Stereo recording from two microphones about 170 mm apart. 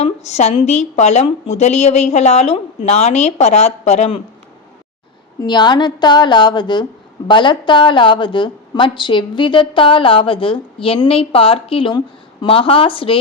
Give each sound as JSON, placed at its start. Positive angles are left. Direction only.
{"t": 0.0, "sound": "a woman's voice", "side_deg": 40}
{"t": 5.4, "sound": "a woman's voice", "side_deg": 25}